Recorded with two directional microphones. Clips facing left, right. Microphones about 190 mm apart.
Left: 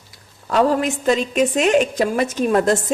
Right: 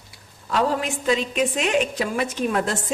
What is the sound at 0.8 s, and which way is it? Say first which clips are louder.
A woman's voice: left 4 dB; 45° left (ahead or behind).